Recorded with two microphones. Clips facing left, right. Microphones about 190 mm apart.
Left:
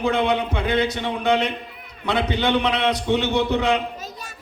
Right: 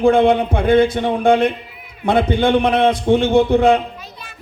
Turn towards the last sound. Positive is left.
turn(degrees=-50)  # may be behind; listen again after turning